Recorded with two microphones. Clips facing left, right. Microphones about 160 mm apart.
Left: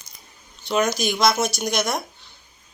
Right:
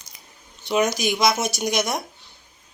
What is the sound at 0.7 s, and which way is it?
Speech, 15° right (ahead or behind).